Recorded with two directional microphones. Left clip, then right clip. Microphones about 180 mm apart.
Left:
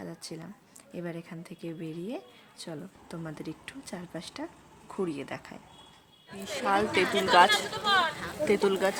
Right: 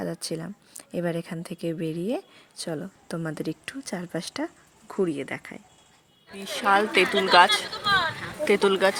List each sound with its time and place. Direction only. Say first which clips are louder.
0.0 s speech: right 10 dB; 45° right (ahead or behind)
4.9 s a woman's voice: right 7 dB; 20° right (ahead or behind)
7.9 s speech: right 2 dB; 10° left (ahead or behind)
8.4 s a woman's voice: right 5 dB; 15° right (ahead or behind)